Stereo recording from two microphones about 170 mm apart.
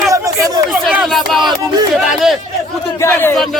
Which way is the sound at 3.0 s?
15° left (ahead or behind).